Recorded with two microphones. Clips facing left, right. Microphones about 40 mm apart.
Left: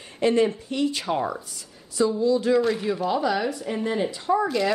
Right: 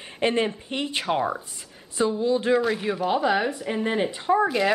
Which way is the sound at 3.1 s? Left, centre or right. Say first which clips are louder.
Right 4 dB; right.